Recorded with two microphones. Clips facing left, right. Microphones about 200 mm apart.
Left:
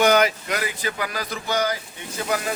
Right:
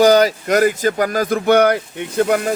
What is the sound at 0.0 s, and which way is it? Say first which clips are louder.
Speech: right 6 dB; 35° right (ahead or behind).